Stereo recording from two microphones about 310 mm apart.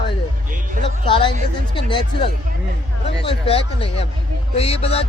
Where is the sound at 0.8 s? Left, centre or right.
Centre.